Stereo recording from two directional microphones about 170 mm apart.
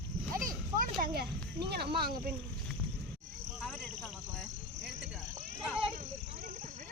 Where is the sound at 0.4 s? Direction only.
55° right (ahead or behind).